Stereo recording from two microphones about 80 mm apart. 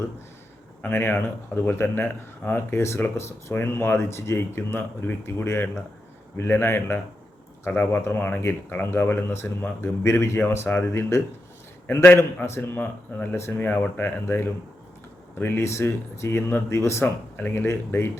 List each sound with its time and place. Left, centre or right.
0.8 s speech: left
13.3 s speech: left
13.7 s speech: centre